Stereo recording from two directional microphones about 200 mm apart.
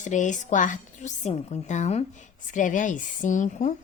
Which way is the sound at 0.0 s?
40° left (ahead or behind).